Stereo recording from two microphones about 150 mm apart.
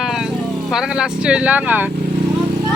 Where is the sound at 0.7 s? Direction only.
5° right (ahead or behind).